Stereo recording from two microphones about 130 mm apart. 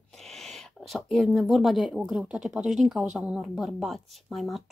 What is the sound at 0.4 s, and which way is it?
Speech, centre (ahead or behind).